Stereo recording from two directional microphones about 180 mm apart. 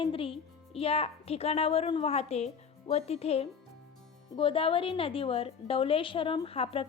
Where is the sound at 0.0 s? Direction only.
30° left (ahead or behind).